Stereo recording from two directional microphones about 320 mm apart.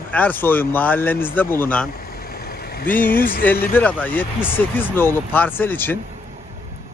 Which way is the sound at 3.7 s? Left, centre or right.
Centre.